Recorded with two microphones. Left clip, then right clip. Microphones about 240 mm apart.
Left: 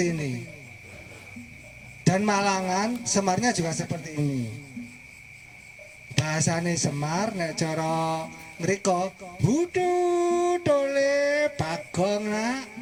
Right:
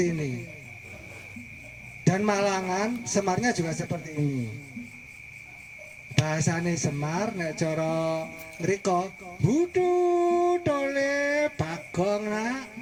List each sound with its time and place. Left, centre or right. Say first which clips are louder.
0.0 s speech: even; left
2.0 s speech: left 1 dB; left
6.1 s speech: left 1 dB; left